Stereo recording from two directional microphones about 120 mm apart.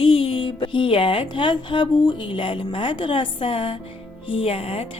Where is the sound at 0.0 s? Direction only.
50° left (ahead or behind).